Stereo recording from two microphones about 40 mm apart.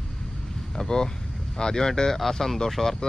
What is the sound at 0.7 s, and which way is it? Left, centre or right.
Speech, centre.